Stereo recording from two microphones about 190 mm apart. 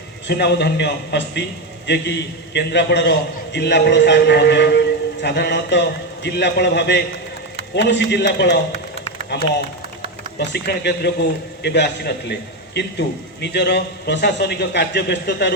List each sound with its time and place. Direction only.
0.3 s a man's voice: 65° left (ahead or behind)
10.3 s a man's voice: 60° left (ahead or behind)